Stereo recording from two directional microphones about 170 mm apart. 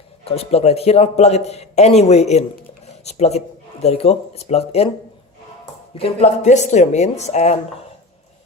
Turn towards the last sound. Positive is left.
turn(degrees=40)  # may be behind; listen again after turning